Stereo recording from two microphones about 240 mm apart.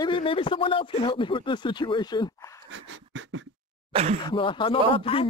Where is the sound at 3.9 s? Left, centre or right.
Right.